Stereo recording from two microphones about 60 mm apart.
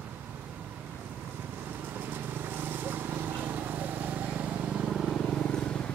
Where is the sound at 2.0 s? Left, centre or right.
Right.